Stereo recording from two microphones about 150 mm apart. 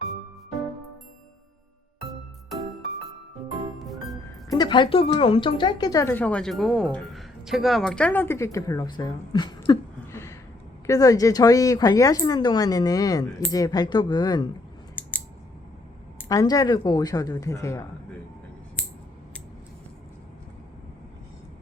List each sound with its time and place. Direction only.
3.8 s music: centre (ahead or behind)
4.5 s speech: 30° left (ahead or behind)
10.1 s a sound: 20° left (ahead or behind)
10.8 s speech: 25° left (ahead or behind)
15.0 s scissors: 10° left (ahead or behind)
16.1 s speech: 20° left (ahead or behind)